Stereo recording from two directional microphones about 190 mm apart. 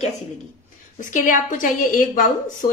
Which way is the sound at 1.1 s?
45° left (ahead or behind).